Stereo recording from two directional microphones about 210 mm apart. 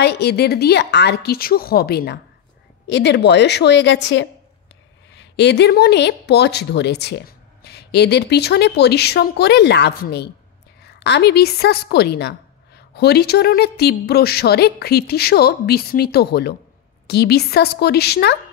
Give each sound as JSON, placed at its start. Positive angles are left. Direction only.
{"t": 0.0, "sound": "a woman's voice", "side_deg": 50}